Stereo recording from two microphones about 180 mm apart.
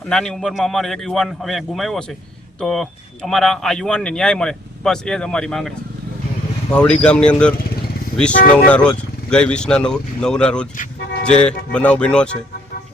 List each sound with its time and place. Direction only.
0.1 s speech: 5° left (ahead or behind)
8.3 s speech: 45° left (ahead or behind)
8.6 s speech: 5° left (ahead or behind)